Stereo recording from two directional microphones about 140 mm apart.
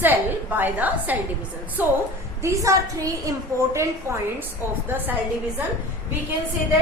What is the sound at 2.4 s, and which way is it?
A woman's voice, 25° right (ahead or behind).